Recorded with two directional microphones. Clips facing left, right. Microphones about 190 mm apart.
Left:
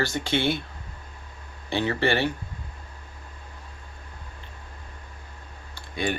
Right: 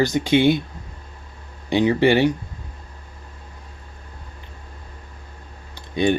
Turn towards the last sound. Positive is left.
turn(degrees=-20)  # may be behind; listen again after turning